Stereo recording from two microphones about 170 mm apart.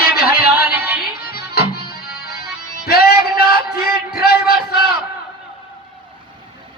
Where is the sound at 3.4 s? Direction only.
65° left (ahead or behind).